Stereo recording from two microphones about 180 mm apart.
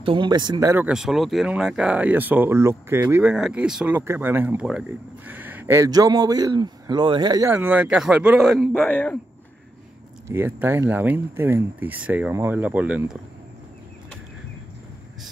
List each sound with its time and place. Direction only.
0.0 s speech: 30° right (ahead or behind)
7.5 s speech: 10° right (ahead or behind)
8.8 s speech: 10° left (ahead or behind)
10.2 s speech: 10° right (ahead or behind)